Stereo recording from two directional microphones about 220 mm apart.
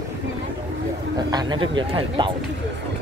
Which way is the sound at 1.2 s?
20° right (ahead or behind).